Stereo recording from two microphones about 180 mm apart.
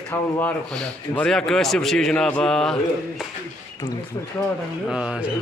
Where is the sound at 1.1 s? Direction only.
5° left (ahead or behind).